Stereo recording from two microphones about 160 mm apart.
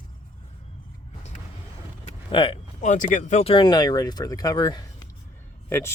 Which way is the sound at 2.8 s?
50° left (ahead or behind).